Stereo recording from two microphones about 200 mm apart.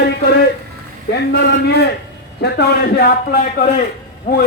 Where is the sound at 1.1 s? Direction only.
55° left (ahead or behind).